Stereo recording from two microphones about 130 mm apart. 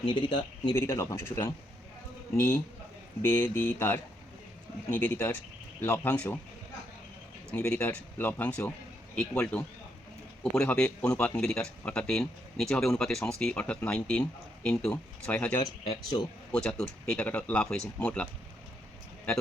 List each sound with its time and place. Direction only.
0.0 s speech: 35° left (ahead or behind)
0.8 s speech: 20° left (ahead or behind)
7.5 s speech: 10° left (ahead or behind)
15.6 s speech: 35° left (ahead or behind)
16.5 s speech: 5° left (ahead or behind)